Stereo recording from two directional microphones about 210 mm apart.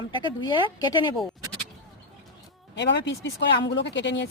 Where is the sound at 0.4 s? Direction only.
20° left (ahead or behind).